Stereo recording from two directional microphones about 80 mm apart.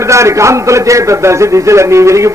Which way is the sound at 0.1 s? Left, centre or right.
Right.